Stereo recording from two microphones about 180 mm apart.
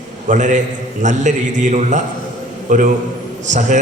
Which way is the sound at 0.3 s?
45° right (ahead or behind).